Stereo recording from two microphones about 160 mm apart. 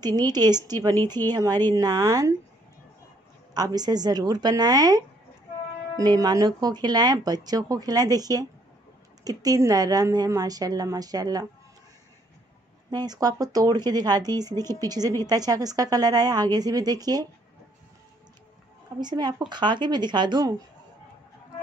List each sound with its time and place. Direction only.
0.0 s speech: 25° right (ahead or behind)
3.5 s speech: 25° right (ahead or behind)
12.9 s speech: 25° right (ahead or behind)
18.9 s speech: 25° right (ahead or behind)